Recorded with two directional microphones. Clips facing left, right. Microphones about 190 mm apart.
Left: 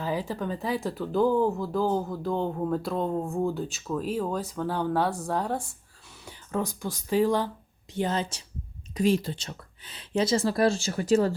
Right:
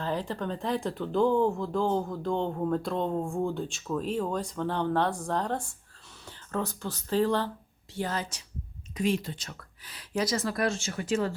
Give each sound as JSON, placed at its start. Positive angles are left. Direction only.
{"t": 0.0, "sound": "speech", "side_deg": 5}
{"t": 7.9, "sound": "a woman's voice", "side_deg": 20}